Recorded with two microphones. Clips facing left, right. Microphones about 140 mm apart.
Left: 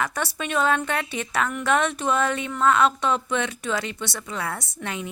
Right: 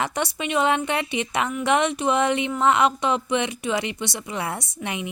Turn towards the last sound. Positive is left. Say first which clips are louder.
# right 2 dB
turn(degrees=-20)  # may be behind; listen again after turning